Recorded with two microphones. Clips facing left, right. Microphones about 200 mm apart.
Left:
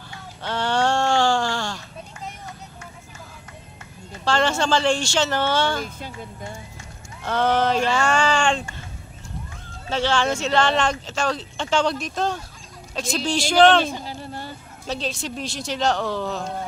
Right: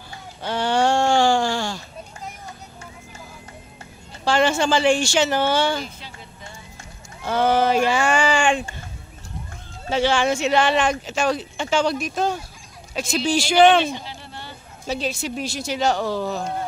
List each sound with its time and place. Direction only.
0.4 s a sound: 10° right (ahead or behind)
4.2 s speech: 10° right (ahead or behind)
5.8 s speech: 50° left (ahead or behind)
7.2 s speech: 10° right (ahead or behind)
9.8 s speech: 10° right (ahead or behind)
13.9 s a sound: 45° left (ahead or behind)
14.9 s speech: 5° right (ahead or behind)